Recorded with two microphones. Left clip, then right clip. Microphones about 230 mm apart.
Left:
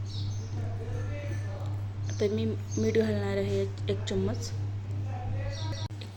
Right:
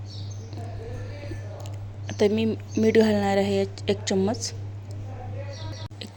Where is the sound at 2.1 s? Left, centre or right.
Right.